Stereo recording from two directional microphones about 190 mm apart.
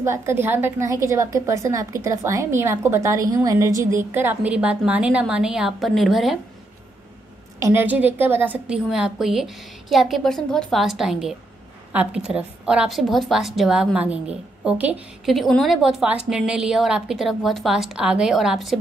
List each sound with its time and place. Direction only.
0.0 s a woman's voice: 15° right (ahead or behind)
7.6 s a woman's voice: 10° right (ahead or behind)